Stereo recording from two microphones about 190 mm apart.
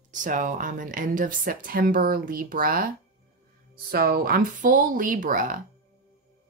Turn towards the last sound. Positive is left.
turn(degrees=-45)  # may be behind; listen again after turning